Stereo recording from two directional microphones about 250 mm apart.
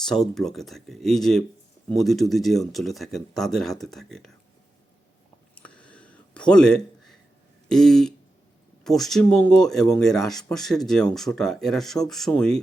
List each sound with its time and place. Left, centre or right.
0.0 s speech: centre
5.5 s a sound: centre
7.7 s speech: centre